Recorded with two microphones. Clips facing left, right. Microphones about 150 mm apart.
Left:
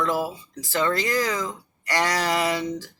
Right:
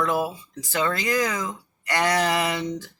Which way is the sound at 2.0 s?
20° right (ahead or behind).